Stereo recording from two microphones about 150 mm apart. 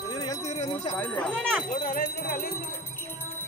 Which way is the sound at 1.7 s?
65° left (ahead or behind).